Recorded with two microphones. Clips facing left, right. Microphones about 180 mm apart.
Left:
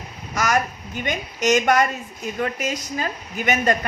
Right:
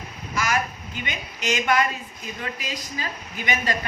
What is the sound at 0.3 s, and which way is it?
A woman's voice, 45° left (ahead or behind).